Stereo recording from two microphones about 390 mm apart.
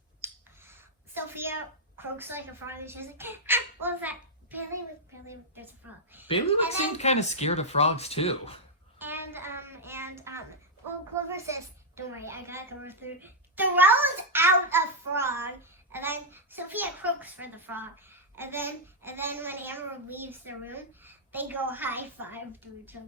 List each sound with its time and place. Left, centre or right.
0.2 s a child's voice: centre
6.2 s speech: centre
9.0 s child singing: centre
11.1 s a child's voice: centre